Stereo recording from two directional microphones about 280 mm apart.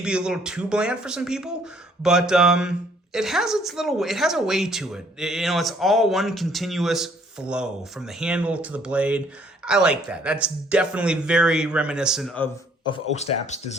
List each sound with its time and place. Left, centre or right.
0.0 s a woman's voice: centre
12.9 s speech: left